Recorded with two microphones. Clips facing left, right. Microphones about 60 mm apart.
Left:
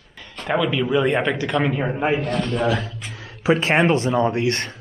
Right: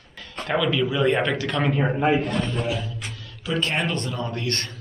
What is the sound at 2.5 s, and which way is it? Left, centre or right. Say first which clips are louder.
Speech: left 6 dB; left.